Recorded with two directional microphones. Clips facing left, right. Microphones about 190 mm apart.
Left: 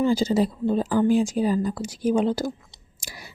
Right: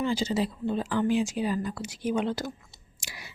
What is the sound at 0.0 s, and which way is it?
Speech, 45° left (ahead or behind).